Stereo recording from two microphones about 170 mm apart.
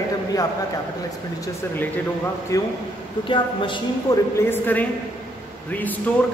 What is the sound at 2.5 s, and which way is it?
Speech, 20° left (ahead or behind).